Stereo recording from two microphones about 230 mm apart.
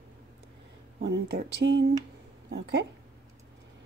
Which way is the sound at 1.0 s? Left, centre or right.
Right.